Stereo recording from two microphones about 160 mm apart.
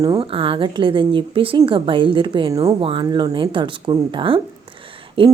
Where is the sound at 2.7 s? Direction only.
35° right (ahead or behind).